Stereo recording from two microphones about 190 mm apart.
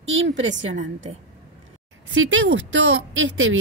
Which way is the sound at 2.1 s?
80° right.